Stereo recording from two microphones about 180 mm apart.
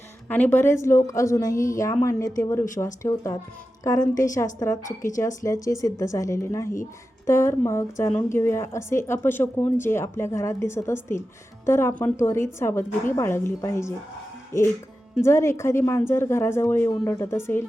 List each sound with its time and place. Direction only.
0.3 s a woman's voice: 10° left (ahead or behind)
15.2 s a woman's voice: 15° left (ahead or behind)